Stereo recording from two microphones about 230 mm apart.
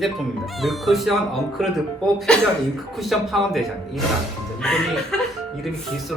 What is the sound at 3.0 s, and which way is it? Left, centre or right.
Speech, centre.